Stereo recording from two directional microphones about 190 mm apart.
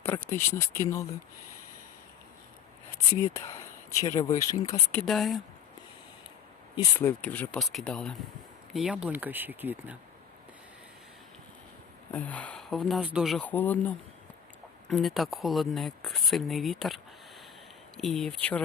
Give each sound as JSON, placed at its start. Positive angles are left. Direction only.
{"t": 0.0, "sound": "speech", "side_deg": 15}
{"t": 3.3, "sound": "speech", "side_deg": 15}
{"t": 7.0, "sound": "speech", "side_deg": 10}
{"t": 12.1, "sound": "speech", "side_deg": 5}